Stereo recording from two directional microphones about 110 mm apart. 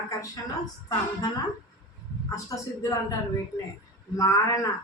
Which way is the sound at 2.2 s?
30° left (ahead or behind).